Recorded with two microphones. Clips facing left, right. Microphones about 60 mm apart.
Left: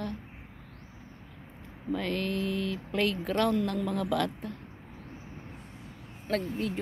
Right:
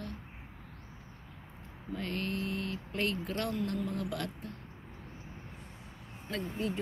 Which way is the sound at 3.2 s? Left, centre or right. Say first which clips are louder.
Left 8 dB; left.